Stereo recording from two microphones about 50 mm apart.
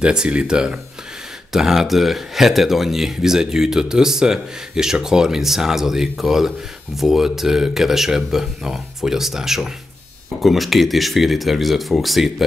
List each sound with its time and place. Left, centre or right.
0.0 s speech: centre
1.5 s speech: centre